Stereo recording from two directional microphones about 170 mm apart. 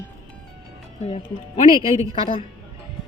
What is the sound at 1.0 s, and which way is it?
A woman's voice, 35° left (ahead or behind).